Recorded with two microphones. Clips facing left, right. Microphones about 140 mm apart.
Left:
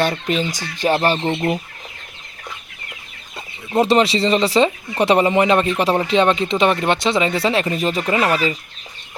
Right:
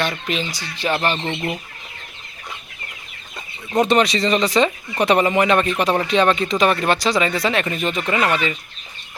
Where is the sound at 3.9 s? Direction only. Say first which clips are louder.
Left 2 dB; 30° left (ahead or behind).